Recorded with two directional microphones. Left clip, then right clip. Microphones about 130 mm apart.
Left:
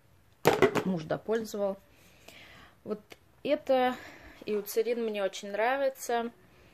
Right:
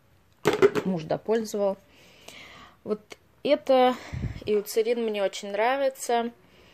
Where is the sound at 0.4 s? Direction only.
55° left (ahead or behind).